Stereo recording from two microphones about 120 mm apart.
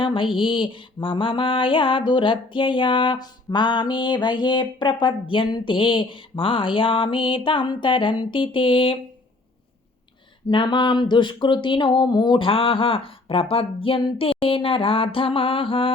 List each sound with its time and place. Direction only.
0.0 s mantra: 45° left (ahead or behind)
10.5 s mantra: 40° left (ahead or behind)